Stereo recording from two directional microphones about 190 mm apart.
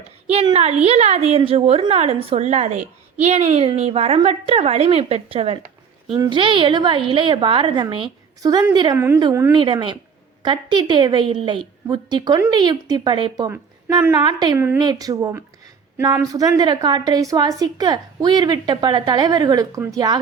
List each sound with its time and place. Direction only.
0.3 s a woman's voice: 35° right (ahead or behind)